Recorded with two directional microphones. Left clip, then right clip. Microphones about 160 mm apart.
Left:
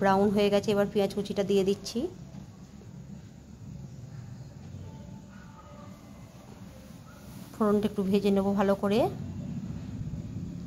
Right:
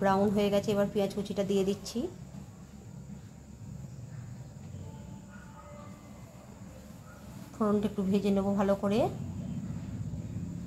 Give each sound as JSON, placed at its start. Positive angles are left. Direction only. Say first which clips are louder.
{"t": 0.0, "sound": "speech", "louder": "left 3 dB", "side_deg": 35}
{"t": 7.5, "sound": "speech", "louder": "left 3 dB", "side_deg": 40}